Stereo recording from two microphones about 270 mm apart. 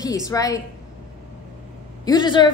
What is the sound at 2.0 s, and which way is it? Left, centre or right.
Speech, centre.